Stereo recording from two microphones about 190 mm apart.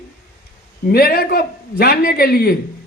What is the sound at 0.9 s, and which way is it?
A man's voice, 55° left (ahead or behind).